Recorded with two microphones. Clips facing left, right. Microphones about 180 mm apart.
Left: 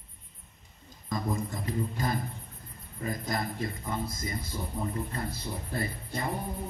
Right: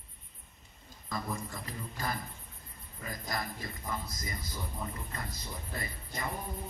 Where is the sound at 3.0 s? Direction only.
25° left (ahead or behind).